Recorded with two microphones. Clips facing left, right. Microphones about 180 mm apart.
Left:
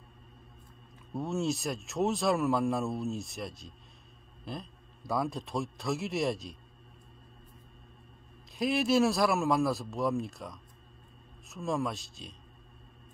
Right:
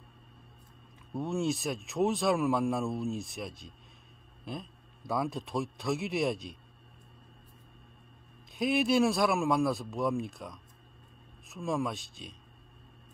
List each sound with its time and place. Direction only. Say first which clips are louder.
1.1 s speech: even; centre (ahead or behind)
8.5 s speech: even; centre (ahead or behind)